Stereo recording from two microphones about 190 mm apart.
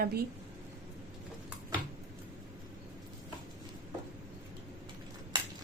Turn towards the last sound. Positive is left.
turn(degrees=-20)  # may be behind; listen again after turning